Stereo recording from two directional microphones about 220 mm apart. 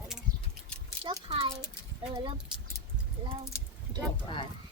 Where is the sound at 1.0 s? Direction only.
20° right (ahead or behind).